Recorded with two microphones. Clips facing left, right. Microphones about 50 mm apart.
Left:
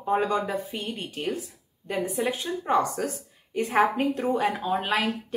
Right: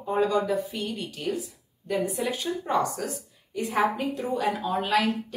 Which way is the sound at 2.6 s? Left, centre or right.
Left.